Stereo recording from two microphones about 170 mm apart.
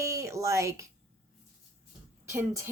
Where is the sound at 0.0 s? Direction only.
15° right (ahead or behind).